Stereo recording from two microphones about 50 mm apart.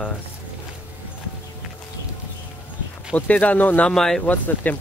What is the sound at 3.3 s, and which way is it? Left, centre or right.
Speech, left.